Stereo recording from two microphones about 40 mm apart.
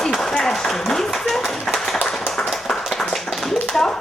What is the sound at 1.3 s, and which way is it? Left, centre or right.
Clapping, centre.